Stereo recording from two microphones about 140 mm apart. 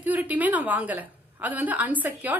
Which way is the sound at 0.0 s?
10° right (ahead or behind).